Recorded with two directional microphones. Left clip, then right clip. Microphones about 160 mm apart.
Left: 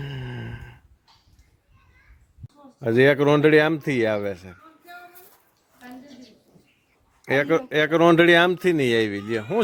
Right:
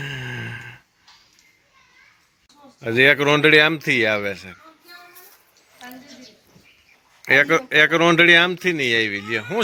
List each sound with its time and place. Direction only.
0.0 s a sound: 10° left (ahead or behind)
2.8 s speech: 35° left (ahead or behind)
7.3 s speech: 20° left (ahead or behind)